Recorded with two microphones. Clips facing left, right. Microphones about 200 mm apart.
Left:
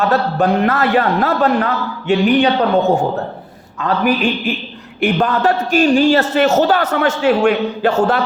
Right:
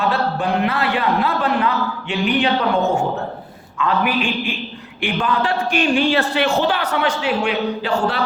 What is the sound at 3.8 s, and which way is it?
A man's voice, 40° left (ahead or behind).